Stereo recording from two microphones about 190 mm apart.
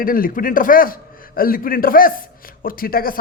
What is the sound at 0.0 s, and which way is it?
A man's voice, 50° left (ahead or behind).